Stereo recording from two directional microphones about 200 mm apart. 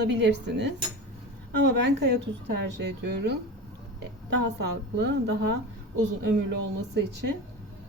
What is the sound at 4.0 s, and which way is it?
A woman's voice, 55° right (ahead or behind).